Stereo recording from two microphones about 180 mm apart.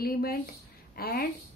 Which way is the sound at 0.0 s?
55° left (ahead or behind).